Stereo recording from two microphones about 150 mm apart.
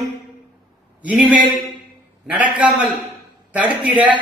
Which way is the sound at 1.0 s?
5° right (ahead or behind).